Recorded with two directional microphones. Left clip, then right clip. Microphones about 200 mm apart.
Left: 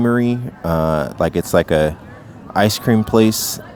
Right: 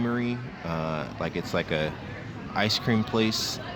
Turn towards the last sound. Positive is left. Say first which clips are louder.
# left 11 dB
turn(degrees=65)  # may be behind; listen again after turning